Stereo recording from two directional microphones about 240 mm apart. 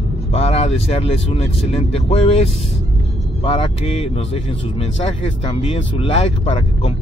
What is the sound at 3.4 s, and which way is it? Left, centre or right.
Speech, left.